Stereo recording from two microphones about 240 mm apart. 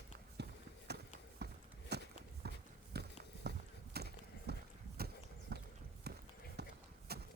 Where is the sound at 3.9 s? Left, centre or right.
Right.